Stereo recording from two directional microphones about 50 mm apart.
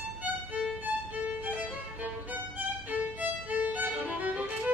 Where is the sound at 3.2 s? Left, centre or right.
Right.